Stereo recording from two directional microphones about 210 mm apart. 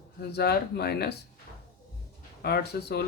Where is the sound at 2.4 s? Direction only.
50° left (ahead or behind).